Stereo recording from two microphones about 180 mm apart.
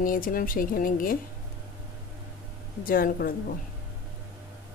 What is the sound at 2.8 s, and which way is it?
Speech, 50° left (ahead or behind).